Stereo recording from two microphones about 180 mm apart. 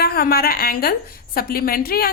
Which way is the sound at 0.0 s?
60° left (ahead or behind).